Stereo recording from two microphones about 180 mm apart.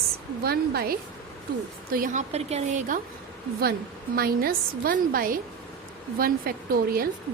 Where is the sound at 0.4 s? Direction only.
60° right (ahead or behind).